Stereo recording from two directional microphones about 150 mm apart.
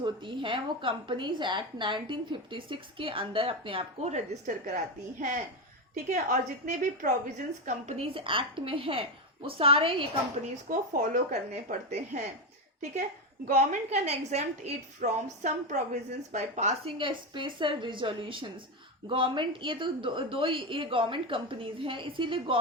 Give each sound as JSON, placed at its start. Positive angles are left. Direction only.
{"t": 0.0, "sound": "a woman's voice", "side_deg": -35}
{"t": 5.9, "sound": "a woman's voice", "side_deg": -60}
{"t": 7.6, "sound": "a woman's voice", "side_deg": -45}
{"t": 10.7, "sound": "a woman's voice", "side_deg": -65}
{"t": 13.6, "sound": "a woman's voice", "side_deg": -50}
{"t": 17.0, "sound": "a woman's voice", "side_deg": -35}